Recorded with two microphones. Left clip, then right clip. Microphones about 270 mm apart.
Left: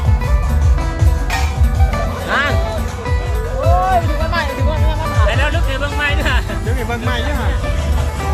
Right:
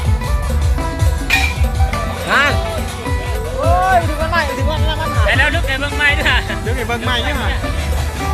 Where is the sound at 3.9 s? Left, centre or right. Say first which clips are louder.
Right 2 dB; centre.